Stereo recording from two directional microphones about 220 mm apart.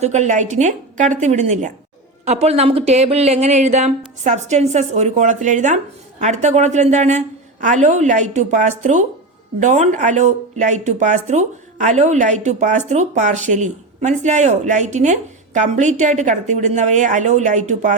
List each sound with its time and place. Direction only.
0.0 s speech: 30° right (ahead or behind)